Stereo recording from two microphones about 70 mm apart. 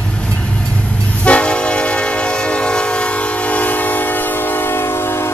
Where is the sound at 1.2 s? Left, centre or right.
Centre; by 5.3 s left.